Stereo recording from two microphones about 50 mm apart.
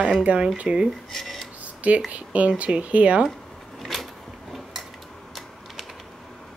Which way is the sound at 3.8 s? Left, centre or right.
Centre.